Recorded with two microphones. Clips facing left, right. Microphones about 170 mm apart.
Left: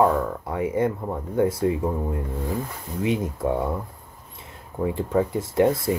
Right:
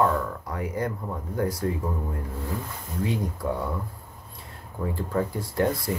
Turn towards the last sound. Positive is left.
turn(degrees=25)  # may be behind; listen again after turning